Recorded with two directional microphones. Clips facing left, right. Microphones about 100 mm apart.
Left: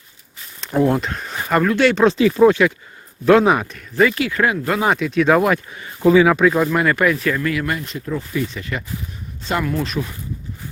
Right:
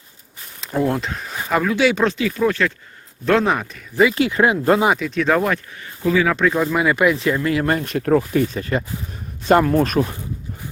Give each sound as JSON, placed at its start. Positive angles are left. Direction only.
{"t": 0.9, "sound": "speech", "side_deg": 0}
{"t": 2.0, "sound": "speech", "side_deg": 30}
{"t": 3.2, "sound": "speech", "side_deg": 5}
{"t": 4.1, "sound": "speech", "side_deg": -25}
{"t": 4.9, "sound": "speech", "side_deg": 0}
{"t": 5.7, "sound": "speech", "side_deg": 20}
{"t": 6.2, "sound": "speech", "side_deg": 5}
{"t": 6.9, "sound": "speech", "side_deg": -20}
{"t": 7.8, "sound": "speech", "side_deg": -60}
{"t": 8.5, "sound": "speech", "side_deg": -35}